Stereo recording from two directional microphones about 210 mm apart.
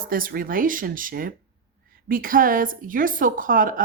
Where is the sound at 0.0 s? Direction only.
40° right (ahead or behind).